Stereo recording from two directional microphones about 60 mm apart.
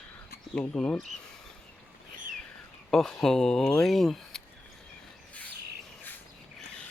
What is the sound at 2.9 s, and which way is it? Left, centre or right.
Speech, centre.